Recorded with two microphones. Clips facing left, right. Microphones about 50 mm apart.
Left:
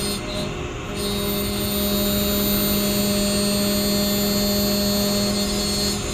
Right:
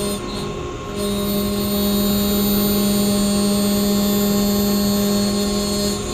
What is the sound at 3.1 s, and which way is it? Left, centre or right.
Mains hum, centre.